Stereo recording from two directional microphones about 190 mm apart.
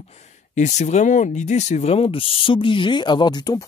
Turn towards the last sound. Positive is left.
turn(degrees=20)  # may be behind; listen again after turning